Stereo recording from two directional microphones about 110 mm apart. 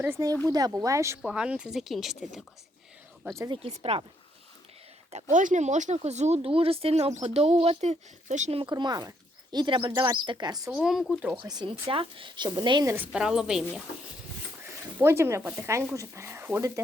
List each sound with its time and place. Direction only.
0.4 s speech: 35° right (ahead or behind)
1.2 s speech: 10° right (ahead or behind)
3.5 s speech: 60° right (ahead or behind)
5.1 s speech: 90° right
8.6 s speech: 40° right (ahead or behind)
10.7 s speech: 5° right (ahead or behind)
11.3 s speech: 40° right (ahead or behind)
11.9 s a woman's voice: 55° right (ahead or behind)
12.8 s speech: 20° right (ahead or behind)
13.1 s speech: 5° right (ahead or behind)
14.9 s speech: 20° right (ahead or behind)